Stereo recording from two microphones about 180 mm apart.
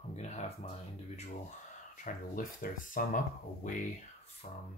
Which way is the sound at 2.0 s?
50° left (ahead or behind).